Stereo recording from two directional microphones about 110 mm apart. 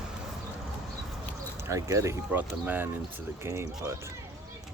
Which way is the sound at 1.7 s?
30° right (ahead or behind).